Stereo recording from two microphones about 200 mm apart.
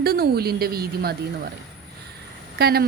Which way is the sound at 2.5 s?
50° right (ahead or behind).